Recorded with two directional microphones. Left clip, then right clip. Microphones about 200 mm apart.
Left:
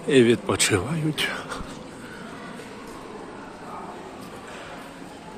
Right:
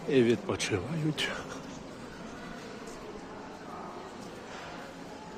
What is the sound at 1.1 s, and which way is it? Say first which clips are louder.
Speech: left 6 dB; 10° right (ahead or behind).